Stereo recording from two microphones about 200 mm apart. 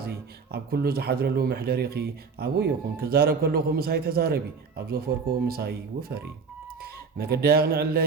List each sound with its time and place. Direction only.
0.0 s speech: 50° right (ahead or behind)